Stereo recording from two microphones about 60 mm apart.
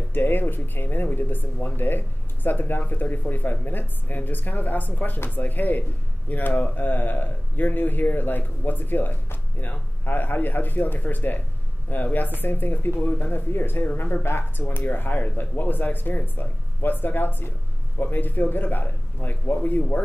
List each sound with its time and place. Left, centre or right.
0.1 s speech: left